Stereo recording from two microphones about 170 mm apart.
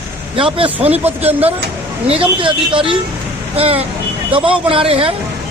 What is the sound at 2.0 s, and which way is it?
Speech, 30° right (ahead or behind).